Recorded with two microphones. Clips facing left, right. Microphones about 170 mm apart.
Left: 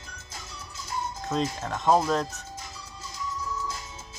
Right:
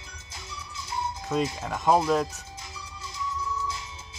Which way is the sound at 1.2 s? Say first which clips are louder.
Right 1 dB; 10° right (ahead or behind).